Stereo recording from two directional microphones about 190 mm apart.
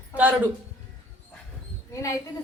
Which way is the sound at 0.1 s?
10° right (ahead or behind).